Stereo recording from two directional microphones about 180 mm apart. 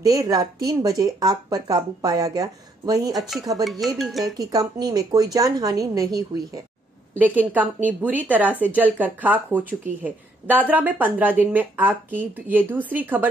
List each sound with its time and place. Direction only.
0.0 s speech: 20° right (ahead or behind)
3.2 s speech: centre (ahead or behind)
4.4 s speech: 20° right (ahead or behind)
7.2 s speech: 10° right (ahead or behind)